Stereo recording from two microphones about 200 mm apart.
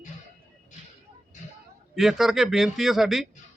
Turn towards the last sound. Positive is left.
turn(degrees=0)  # may be behind; listen again after turning